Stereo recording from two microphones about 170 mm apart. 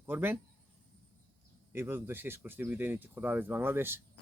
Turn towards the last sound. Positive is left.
turn(degrees=-15)  # may be behind; listen again after turning